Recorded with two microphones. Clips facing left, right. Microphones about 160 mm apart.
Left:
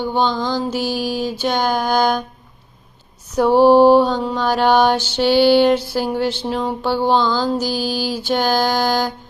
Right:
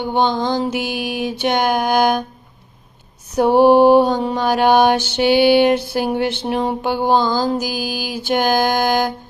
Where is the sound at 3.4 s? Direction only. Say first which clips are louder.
Even; 15° right (ahead or behind).